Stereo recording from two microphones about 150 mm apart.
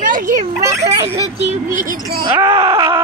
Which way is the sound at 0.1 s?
60° right (ahead or behind).